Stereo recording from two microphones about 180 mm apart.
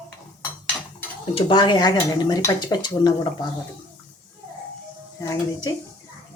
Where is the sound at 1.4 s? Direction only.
25° left (ahead or behind).